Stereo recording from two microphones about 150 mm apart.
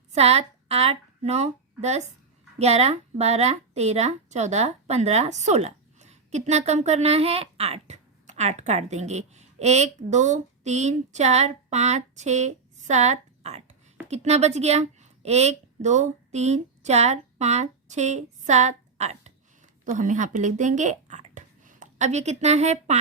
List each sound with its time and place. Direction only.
0.1 s a woman's voice: 45° right (ahead or behind)